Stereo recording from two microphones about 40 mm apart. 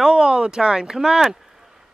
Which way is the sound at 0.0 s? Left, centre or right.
Centre.